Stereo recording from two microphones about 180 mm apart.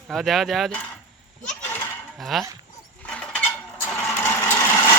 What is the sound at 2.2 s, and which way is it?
Speech, centre (ahead or behind).